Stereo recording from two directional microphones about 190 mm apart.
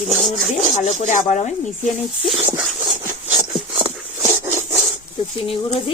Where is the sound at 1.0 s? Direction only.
40° left (ahead or behind).